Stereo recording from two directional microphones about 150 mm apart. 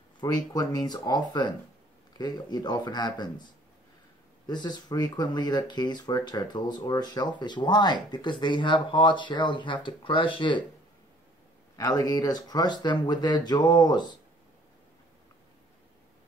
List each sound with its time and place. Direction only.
0.2 s speech: 25° left (ahead or behind)
4.5 s speech: 30° left (ahead or behind)
11.7 s speech: 25° left (ahead or behind)